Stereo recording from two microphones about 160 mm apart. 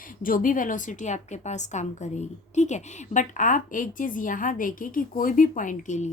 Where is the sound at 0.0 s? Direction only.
60° left (ahead or behind).